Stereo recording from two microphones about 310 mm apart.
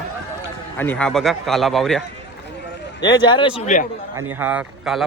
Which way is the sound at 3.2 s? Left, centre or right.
Centre.